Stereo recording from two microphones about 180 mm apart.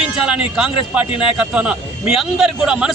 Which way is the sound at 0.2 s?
5° right (ahead or behind).